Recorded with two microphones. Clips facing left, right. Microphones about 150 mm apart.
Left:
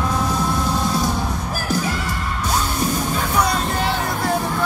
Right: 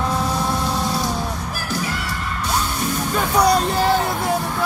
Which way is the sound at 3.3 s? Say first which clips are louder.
Right 5 dB; 35° right (ahead or behind).